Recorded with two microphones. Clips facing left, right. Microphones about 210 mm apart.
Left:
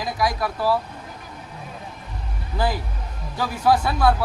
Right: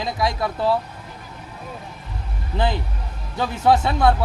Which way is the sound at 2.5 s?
25° right (ahead or behind).